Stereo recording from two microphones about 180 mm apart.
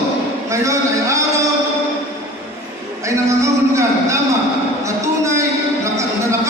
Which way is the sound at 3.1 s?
15° right (ahead or behind).